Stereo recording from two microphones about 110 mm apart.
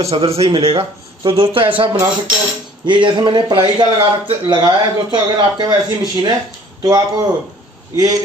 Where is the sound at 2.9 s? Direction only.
45° right (ahead or behind).